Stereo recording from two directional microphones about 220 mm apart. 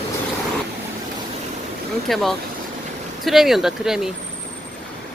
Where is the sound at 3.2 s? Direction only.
Centre (ahead or behind).